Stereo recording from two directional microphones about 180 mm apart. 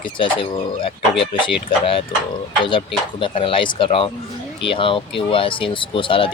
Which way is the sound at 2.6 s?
25° left (ahead or behind).